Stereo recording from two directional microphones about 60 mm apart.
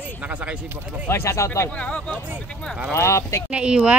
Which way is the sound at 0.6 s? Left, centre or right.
Right.